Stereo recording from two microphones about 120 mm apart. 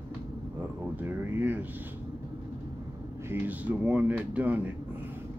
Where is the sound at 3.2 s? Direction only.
15° right (ahead or behind).